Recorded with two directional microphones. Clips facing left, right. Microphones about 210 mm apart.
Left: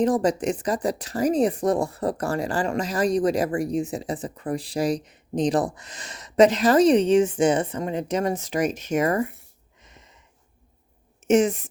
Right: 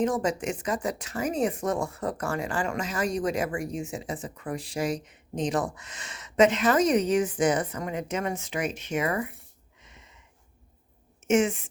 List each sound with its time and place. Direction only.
0.0 s speech: 35° left (ahead or behind)
9.8 s a sound: 40° left (ahead or behind)
11.2 s a woman's voice: 35° left (ahead or behind)